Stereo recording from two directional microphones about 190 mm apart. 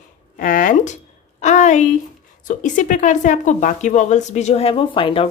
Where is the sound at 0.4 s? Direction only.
45° left (ahead or behind).